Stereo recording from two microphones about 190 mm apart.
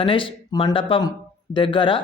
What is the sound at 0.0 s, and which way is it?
Speech, 25° left (ahead or behind).